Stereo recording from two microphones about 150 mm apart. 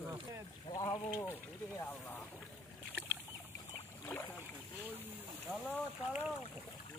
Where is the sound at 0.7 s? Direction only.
30° left (ahead or behind).